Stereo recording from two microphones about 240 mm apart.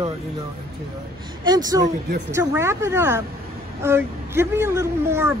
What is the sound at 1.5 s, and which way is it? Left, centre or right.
Speech, centre.